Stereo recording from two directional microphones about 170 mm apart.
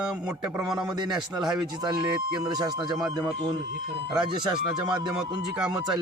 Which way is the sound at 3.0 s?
25° right (ahead or behind).